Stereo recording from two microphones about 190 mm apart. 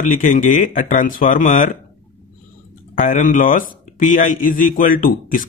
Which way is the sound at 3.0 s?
45° left (ahead or behind).